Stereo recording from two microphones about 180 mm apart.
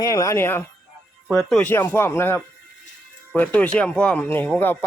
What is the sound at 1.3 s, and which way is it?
Speech, 5° left (ahead or behind).